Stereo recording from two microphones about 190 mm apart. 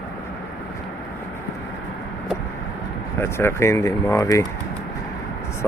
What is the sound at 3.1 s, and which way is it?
Speech, 15° left (ahead or behind).